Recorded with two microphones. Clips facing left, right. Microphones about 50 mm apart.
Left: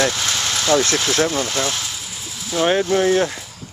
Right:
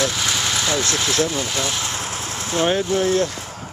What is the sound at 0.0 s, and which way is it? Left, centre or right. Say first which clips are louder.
Vehicle: left 1 dB; centre.